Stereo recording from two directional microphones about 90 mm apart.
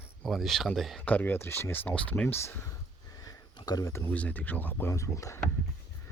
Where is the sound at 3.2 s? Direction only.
45° left (ahead or behind).